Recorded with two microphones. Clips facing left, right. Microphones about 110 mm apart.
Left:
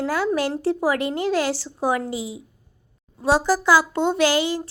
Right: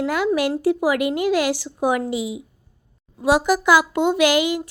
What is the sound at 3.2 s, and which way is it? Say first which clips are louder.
Speech: right 2 dB; 15° right (ahead or behind).